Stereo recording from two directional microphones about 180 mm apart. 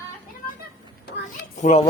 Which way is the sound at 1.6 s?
40° left (ahead or behind).